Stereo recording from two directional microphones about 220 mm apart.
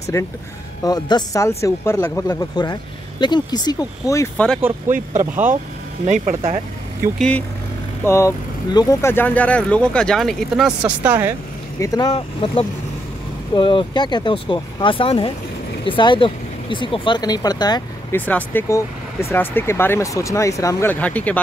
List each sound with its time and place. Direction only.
0.1 s speech: 15° left (ahead or behind)
4.8 s speech: 35° right (ahead or behind)
7.2 s speech: 5° left (ahead or behind)
11.8 s speech: 15° left (ahead or behind)